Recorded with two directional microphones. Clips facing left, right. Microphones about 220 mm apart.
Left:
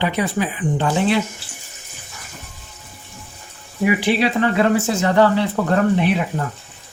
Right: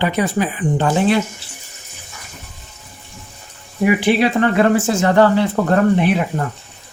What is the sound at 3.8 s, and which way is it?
Speech, 55° right (ahead or behind).